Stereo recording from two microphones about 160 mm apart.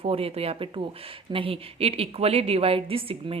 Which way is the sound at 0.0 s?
35° right (ahead or behind).